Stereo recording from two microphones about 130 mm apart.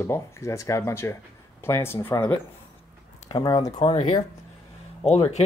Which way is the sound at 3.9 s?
50° left (ahead or behind).